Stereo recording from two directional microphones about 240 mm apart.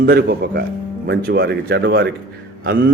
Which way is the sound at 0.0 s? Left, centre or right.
Right.